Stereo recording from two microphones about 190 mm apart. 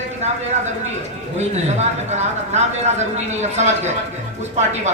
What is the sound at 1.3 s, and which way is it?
A man's voice, 35° right (ahead or behind).